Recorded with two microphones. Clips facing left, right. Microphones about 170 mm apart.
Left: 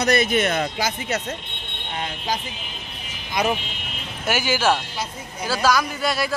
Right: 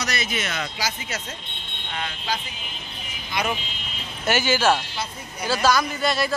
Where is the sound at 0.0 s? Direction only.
55° left (ahead or behind).